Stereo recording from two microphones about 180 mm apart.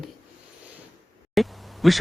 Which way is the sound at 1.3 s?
Centre (ahead or behind).